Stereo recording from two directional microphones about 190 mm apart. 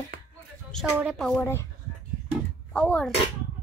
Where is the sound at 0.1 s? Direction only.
55° right (ahead or behind).